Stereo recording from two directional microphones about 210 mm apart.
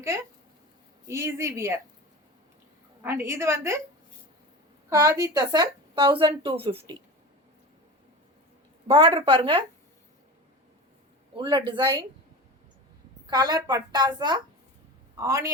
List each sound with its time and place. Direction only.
1.0 s a woman's voice: 15° right (ahead or behind)
3.0 s a woman's voice: 10° right (ahead or behind)
4.9 s speech: 15° right (ahead or behind)
8.9 s speech: 25° right (ahead or behind)
11.3 s speech: 20° right (ahead or behind)
13.3 s a woman's voice: 20° right (ahead or behind)